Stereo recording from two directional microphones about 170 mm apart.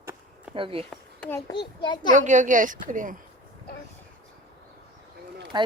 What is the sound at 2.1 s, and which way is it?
A woman's voice, 45° right (ahead or behind).